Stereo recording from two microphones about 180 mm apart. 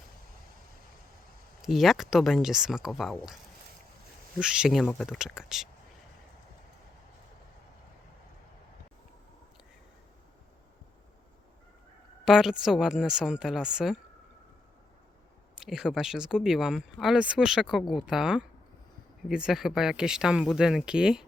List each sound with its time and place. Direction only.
1.6 s speech: centre (ahead or behind)
4.4 s speech: 5° right (ahead or behind)
12.2 s speech: 5° right (ahead or behind)
15.5 s speech: 5° right (ahead or behind)